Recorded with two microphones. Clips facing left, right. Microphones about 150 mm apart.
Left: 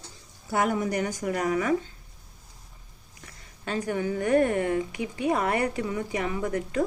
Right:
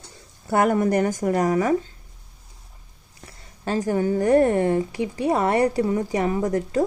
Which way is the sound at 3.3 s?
35° right (ahead or behind).